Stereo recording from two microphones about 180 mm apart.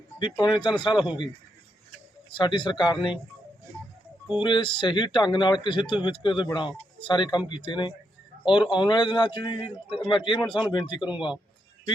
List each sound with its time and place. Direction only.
0.2 s speech: 25° left (ahead or behind)
2.3 s speech: 25° left (ahead or behind)
4.4 s speech: 25° left (ahead or behind)